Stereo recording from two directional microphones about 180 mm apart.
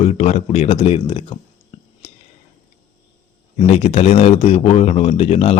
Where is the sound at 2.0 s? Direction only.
35° left (ahead or behind).